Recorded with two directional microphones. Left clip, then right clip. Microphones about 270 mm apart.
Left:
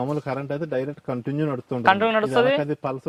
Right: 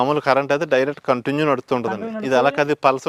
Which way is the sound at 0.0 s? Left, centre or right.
Centre.